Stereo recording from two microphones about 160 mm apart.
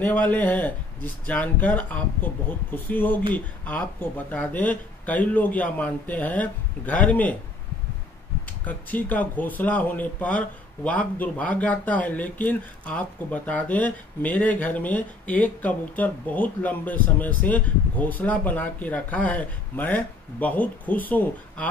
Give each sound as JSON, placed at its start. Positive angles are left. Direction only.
{"t": 0.0, "sound": "speech", "side_deg": 10}
{"t": 8.6, "sound": "speech", "side_deg": 10}